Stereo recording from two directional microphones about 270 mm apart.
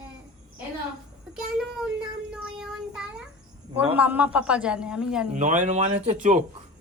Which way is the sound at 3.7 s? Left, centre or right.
Centre.